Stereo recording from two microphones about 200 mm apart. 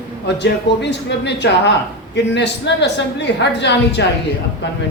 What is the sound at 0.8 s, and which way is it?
Speech, 60° left (ahead or behind).